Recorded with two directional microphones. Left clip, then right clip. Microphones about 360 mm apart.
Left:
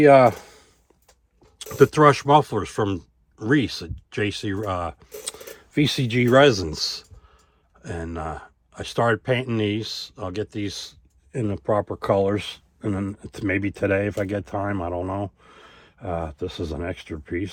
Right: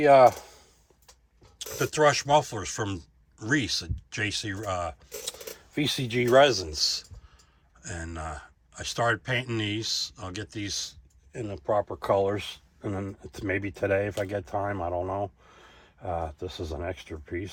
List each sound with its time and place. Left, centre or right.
0.0 s speech: left; by 4.9 s centre
5.2 s speech: left